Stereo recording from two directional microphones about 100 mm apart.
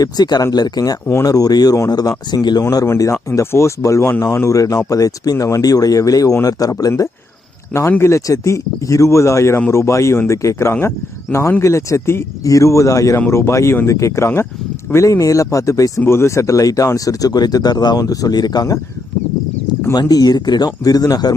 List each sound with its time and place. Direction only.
0.0 s speech: 45° left (ahead or behind)
2.8 s speech: 25° left (ahead or behind)
19.9 s speech: 40° left (ahead or behind)